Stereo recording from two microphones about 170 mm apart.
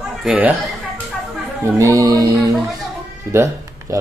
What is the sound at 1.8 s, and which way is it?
Speech, 20° right (ahead or behind).